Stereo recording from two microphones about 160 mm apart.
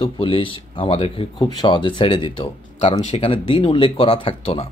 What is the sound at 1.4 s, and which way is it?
A man's voice, 25° left (ahead or behind).